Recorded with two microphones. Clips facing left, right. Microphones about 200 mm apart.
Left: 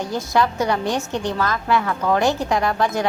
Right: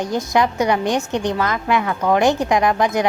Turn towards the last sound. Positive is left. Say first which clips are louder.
# right 3 dB
turn(degrees=-15)  # may be behind; listen again after turning